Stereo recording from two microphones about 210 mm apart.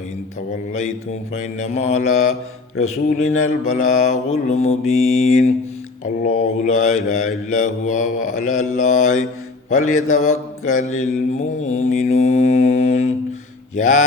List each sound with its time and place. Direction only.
1.4 s mantra: 35° left (ahead or behind)